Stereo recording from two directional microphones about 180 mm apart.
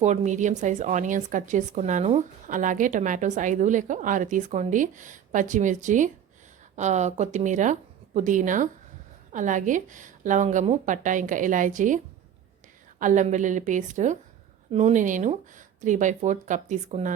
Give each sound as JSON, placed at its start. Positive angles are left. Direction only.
{"t": 0.0, "sound": "a woman's voice", "side_deg": -40}
{"t": 13.0, "sound": "a woman's voice", "side_deg": -45}